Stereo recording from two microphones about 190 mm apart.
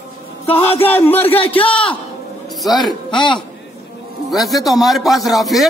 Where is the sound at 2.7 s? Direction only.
20° left (ahead or behind).